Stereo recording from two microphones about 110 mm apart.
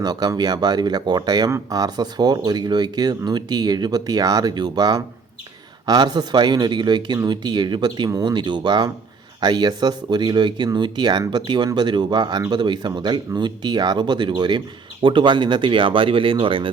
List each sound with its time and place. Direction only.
0.0 s speech: 40° right (ahead or behind)